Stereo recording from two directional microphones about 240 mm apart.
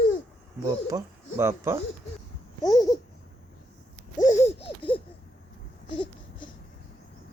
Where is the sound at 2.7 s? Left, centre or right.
Centre.